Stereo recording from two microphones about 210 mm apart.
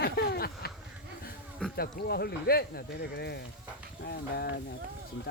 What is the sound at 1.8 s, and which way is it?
Speech, 50° left (ahead or behind).